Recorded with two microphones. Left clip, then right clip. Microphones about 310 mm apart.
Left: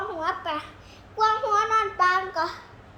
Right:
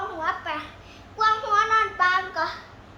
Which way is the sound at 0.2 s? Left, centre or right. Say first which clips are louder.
Even; left.